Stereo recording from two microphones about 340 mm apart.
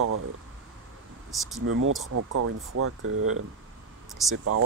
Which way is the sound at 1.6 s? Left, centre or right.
Right.